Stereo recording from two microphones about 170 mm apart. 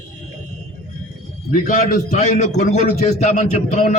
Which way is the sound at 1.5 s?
55° left (ahead or behind).